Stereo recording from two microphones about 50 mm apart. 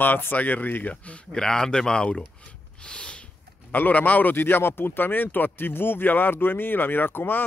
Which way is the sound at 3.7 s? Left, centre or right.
Left.